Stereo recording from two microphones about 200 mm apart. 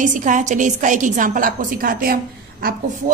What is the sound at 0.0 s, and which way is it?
A man's voice, 40° right (ahead or behind).